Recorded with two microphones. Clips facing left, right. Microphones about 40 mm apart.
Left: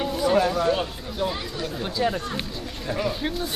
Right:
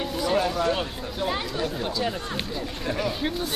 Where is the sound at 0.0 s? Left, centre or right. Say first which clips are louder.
Left 3 dB; centre.